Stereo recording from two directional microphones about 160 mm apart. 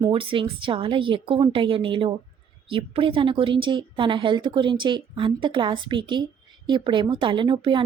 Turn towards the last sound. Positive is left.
turn(degrees=-30)  # may be behind; listen again after turning